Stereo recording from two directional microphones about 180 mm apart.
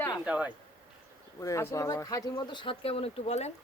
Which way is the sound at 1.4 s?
15° left (ahead or behind).